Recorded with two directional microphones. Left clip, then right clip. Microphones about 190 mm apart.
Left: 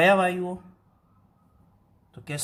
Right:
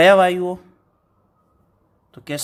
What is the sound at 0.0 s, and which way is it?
Speech, 45° right (ahead or behind).